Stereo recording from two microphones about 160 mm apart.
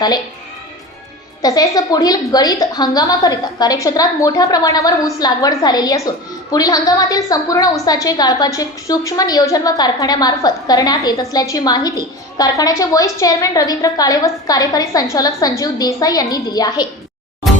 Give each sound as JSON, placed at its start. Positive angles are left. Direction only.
{"t": 1.4, "sound": "a woman's voice", "side_deg": 25}